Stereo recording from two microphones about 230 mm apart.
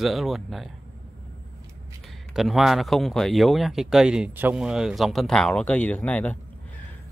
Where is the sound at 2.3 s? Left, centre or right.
Centre.